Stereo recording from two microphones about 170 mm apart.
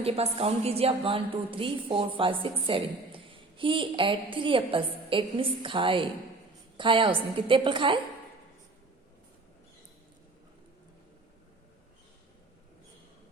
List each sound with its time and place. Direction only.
0.0 s a woman's voice: 35° right (ahead or behind)